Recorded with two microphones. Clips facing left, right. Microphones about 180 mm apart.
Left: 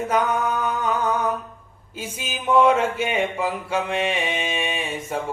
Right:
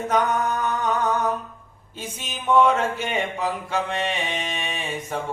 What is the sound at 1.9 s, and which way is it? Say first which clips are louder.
Speech: left 3 dB; 5° left (ahead or behind).